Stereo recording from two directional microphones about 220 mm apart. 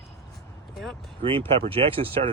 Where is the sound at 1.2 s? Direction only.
25° right (ahead or behind).